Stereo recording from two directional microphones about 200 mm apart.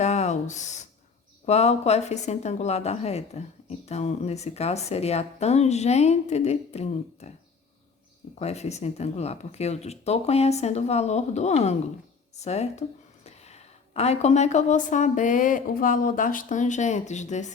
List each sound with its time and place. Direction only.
0.0 s a sound: 35° left (ahead or behind)
1.5 s a woman's voice: 30° left (ahead or behind)
8.4 s a woman's voice: 30° left (ahead or behind)